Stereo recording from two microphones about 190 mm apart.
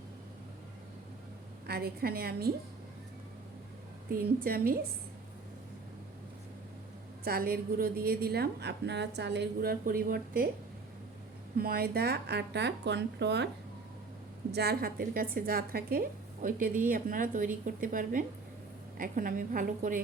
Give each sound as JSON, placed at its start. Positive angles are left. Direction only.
{"t": 1.6, "sound": "speech", "side_deg": -55}
{"t": 4.1, "sound": "a woman's voice", "side_deg": -50}
{"t": 7.3, "sound": "a woman's voice", "side_deg": -50}
{"t": 11.5, "sound": "speech", "side_deg": -50}
{"t": 14.5, "sound": "a woman's voice", "side_deg": -55}